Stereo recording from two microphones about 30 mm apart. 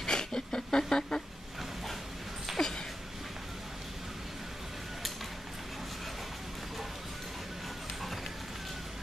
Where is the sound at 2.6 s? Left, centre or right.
Centre.